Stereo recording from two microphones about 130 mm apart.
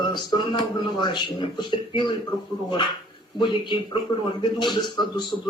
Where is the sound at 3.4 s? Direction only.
40° left (ahead or behind).